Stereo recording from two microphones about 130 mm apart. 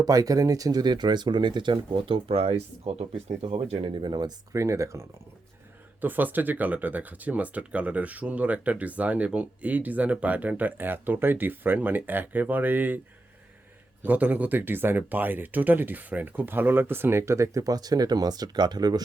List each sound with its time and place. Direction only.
0.0 s speech: 30° right (ahead or behind)
14.0 s speech: 15° right (ahead or behind); by 19.0 s 30° right (ahead or behind)